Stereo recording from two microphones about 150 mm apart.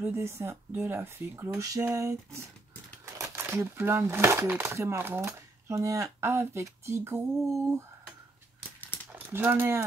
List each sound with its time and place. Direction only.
0.0 s speech: 15° right (ahead or behind)
9.1 s speech: 15° right (ahead or behind)